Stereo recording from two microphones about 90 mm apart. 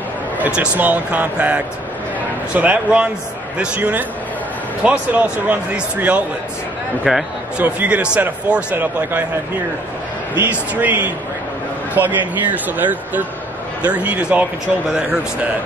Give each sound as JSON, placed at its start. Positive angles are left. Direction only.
{"t": 0.4, "sound": "speech", "side_deg": -15}
{"t": 7.1, "sound": "speech", "side_deg": -5}
{"t": 7.5, "sound": "speech", "side_deg": -15}
{"t": 10.3, "sound": "speech", "side_deg": -20}